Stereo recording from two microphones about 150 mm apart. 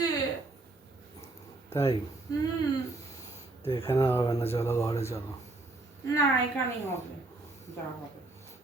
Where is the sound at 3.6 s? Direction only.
40° left (ahead or behind).